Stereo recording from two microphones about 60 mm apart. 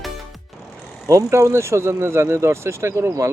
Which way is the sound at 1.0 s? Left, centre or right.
Right.